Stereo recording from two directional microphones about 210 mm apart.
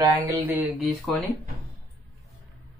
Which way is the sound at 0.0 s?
10° right (ahead or behind).